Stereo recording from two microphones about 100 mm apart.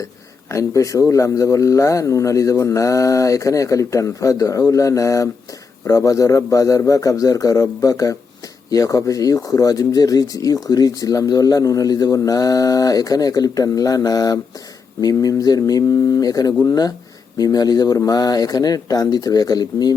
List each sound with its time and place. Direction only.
0.5 s speech: 35° left (ahead or behind)